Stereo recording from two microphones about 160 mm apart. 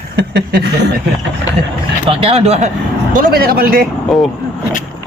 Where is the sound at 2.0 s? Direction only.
35° right (ahead or behind).